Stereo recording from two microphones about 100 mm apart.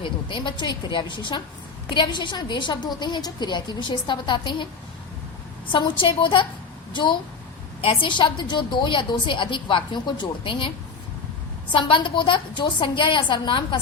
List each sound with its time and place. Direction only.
0.0 s a woman's voice: 55° left (ahead or behind)
5.7 s a woman's voice: 55° left (ahead or behind)
11.7 s a woman's voice: 55° left (ahead or behind)